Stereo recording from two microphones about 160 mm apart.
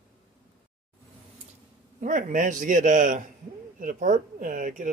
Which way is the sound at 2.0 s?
50° right (ahead or behind).